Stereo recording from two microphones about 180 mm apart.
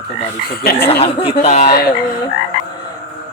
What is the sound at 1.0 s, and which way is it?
Speech, 30° left (ahead or behind).